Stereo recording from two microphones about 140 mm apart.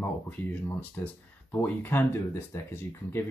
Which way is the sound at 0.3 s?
15° left (ahead or behind).